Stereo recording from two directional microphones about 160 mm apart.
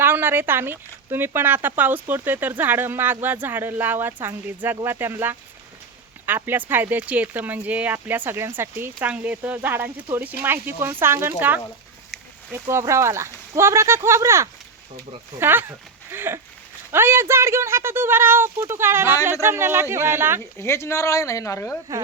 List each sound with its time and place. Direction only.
0.0 s speech: 15° right (ahead or behind)
20.6 s speech: 15° left (ahead or behind)